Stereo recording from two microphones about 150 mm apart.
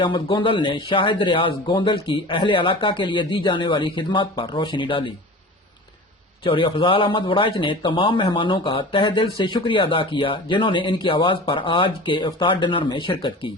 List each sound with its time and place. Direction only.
0.0 s a man's voice: 30° left (ahead or behind)
6.4 s a man's voice: 35° left (ahead or behind)